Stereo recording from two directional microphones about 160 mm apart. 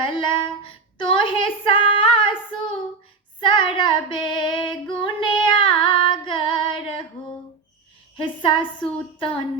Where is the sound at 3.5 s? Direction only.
30° left (ahead or behind).